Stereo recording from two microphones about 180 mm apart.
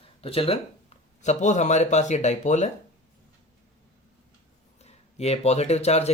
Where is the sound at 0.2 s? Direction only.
30° left (ahead or behind).